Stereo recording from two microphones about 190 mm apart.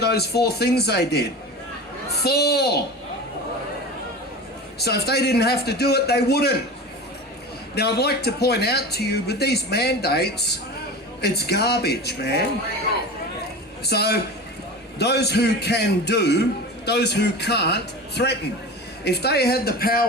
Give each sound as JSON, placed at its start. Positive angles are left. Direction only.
{"t": 0.0, "sound": "a man's voice", "side_deg": 60}
{"t": 4.8, "sound": "a man's voice", "side_deg": 55}
{"t": 7.8, "sound": "a man's voice", "side_deg": 60}
{"t": 13.8, "sound": "a man's voice", "side_deg": 60}